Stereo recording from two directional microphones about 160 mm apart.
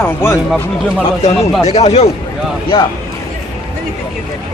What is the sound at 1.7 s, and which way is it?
Speech, 45° left (ahead or behind).